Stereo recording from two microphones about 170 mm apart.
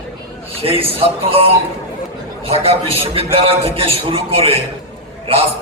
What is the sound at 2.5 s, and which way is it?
A man's voice, 35° right (ahead or behind).